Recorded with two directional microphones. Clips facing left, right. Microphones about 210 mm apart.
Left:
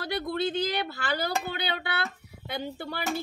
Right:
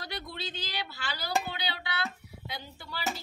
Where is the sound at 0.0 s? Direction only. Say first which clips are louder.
Left 11 dB; 55° left (ahead or behind).